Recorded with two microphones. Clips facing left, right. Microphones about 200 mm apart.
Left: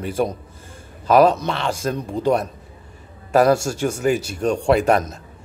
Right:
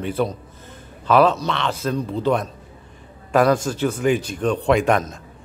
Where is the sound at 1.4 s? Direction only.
45° left (ahead or behind).